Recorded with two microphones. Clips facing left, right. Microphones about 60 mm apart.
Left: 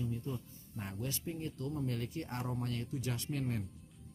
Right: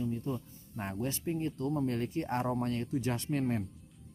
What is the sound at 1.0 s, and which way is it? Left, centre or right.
Speech, right.